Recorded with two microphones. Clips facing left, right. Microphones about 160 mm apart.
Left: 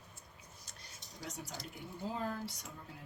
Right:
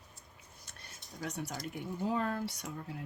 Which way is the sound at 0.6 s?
60° right (ahead or behind).